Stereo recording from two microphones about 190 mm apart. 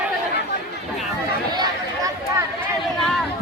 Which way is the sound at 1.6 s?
20° right (ahead or behind).